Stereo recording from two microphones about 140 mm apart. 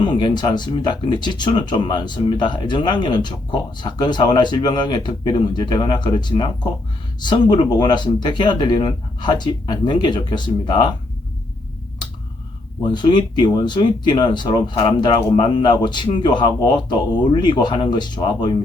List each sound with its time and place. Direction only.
0.0 s a man's voice: 35° left (ahead or behind)
12.8 s a man's voice: 35° left (ahead or behind)